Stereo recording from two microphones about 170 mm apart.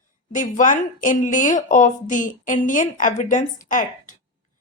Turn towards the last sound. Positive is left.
turn(degrees=50)  # may be behind; listen again after turning